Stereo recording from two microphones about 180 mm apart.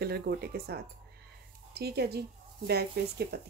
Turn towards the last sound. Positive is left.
turn(degrees=-60)  # may be behind; listen again after turning